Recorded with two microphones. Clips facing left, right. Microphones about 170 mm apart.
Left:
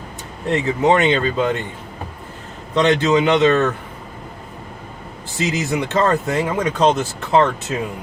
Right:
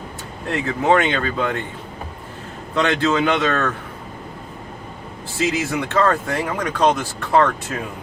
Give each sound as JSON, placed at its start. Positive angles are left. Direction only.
{"t": 0.5, "sound": "speech", "side_deg": 20}
{"t": 2.7, "sound": "speech", "side_deg": 20}
{"t": 5.5, "sound": "speech", "side_deg": 20}